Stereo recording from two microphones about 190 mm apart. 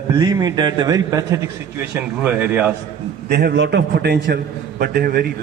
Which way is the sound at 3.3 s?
55° right (ahead or behind).